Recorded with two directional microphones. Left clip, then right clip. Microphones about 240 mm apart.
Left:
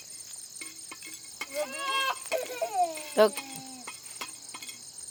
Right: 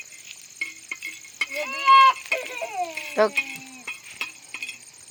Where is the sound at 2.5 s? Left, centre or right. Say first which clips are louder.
Even; centre.